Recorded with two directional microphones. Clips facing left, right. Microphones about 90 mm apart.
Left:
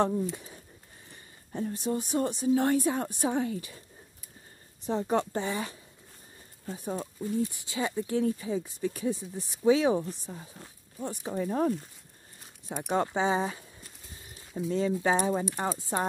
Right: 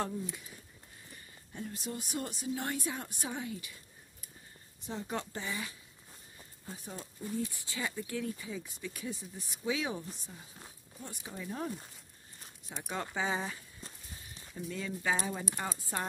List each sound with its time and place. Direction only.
0.3 s speech: 30° left (ahead or behind)
2.5 s speech: 45° left (ahead or behind)
4.8 s speech: 40° left (ahead or behind)
13.1 s speech: 25° left (ahead or behind)